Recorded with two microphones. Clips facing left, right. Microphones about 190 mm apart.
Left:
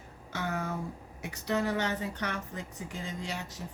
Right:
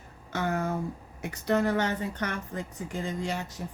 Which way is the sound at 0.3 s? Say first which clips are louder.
Right 5 dB; 50° right (ahead or behind).